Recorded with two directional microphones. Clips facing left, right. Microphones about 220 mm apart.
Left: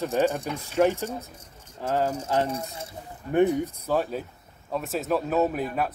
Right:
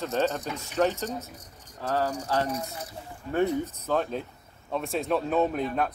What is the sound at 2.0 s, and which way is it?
Speech, 25° left (ahead or behind).